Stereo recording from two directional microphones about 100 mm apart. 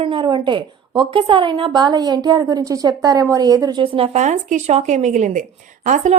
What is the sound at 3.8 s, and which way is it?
Speech, 65° right (ahead or behind).